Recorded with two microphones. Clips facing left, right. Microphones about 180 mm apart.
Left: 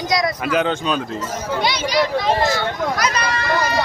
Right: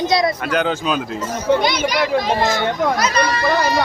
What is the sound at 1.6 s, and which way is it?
Speech, 50° right (ahead or behind).